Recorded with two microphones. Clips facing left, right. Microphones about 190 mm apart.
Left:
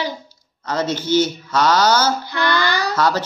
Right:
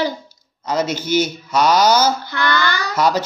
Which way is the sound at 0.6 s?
10° right (ahead or behind).